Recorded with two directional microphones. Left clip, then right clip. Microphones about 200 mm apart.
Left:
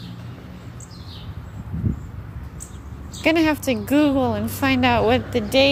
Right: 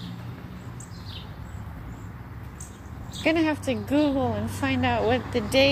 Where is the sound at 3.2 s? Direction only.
25° left (ahead or behind).